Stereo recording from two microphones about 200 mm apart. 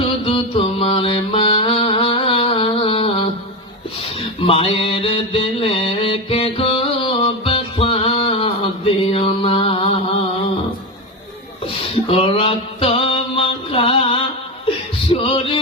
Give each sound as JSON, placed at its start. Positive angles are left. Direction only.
{"t": 0.0, "sound": "mantra", "side_deg": 30}
{"t": 4.4, "sound": "mantra", "side_deg": 30}
{"t": 12.1, "sound": "mantra", "side_deg": 30}
{"t": 15.1, "sound": "music", "side_deg": 25}